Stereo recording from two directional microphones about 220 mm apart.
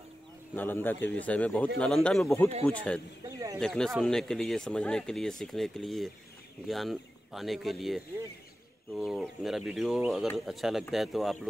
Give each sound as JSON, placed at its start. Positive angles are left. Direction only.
{"t": 0.6, "sound": "speech", "side_deg": 10}
{"t": 3.3, "sound": "speech", "side_deg": -15}
{"t": 3.5, "sound": "speech", "side_deg": 5}